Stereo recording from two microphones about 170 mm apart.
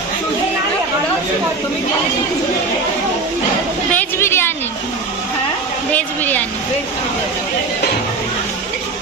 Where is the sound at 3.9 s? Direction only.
15° left (ahead or behind).